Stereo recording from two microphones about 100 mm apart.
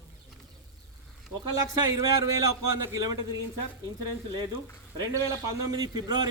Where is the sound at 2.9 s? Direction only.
35° right (ahead or behind).